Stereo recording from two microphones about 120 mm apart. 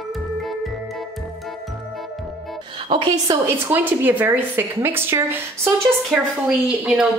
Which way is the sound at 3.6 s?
15° right (ahead or behind).